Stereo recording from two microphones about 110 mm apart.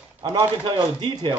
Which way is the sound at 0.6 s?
40° right (ahead or behind).